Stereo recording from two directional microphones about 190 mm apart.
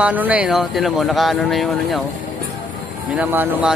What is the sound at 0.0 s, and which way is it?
Speech, 10° right (ahead or behind).